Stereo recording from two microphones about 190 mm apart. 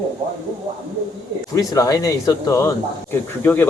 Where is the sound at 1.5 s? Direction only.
20° left (ahead or behind).